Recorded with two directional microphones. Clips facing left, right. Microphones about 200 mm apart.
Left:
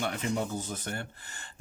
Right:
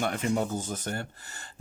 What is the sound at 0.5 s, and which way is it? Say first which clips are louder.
Speech: right 3 dB; 45° right (ahead or behind).